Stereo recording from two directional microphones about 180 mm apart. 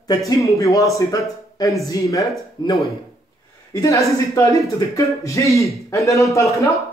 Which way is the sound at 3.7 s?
15° left (ahead or behind).